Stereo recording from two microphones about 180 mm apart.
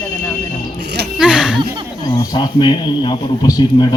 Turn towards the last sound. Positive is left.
turn(degrees=20)  # may be behind; listen again after turning